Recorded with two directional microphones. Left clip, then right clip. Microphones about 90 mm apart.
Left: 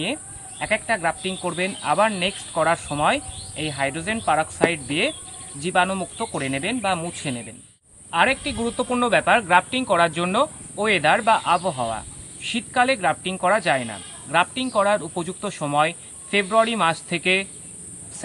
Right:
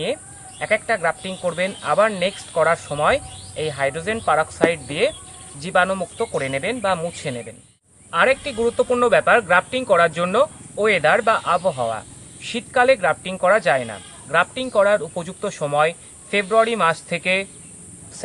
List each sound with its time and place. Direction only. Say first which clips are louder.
0.6 s speech: right 2 dB; 30° right (ahead or behind)